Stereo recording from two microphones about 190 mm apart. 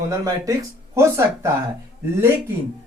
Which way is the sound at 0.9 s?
15° right (ahead or behind).